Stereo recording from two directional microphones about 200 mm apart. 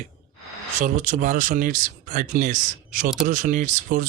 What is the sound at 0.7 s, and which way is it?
Speech, 40° right (ahead or behind).